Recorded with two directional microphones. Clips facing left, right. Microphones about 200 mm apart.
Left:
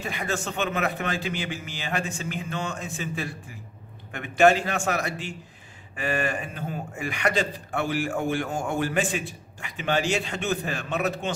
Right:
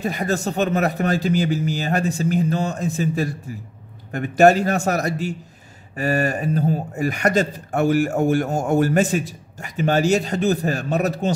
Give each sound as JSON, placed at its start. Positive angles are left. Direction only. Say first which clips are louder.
{"t": 0.0, "sound": "speech", "louder": "right 7 dB", "side_deg": -40}